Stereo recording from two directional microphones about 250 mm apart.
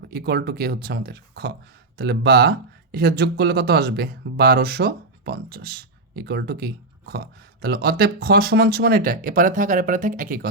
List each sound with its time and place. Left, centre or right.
0.1 s speech: right